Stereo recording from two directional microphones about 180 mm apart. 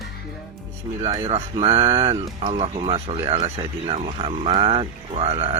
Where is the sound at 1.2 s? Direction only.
35° right (ahead or behind).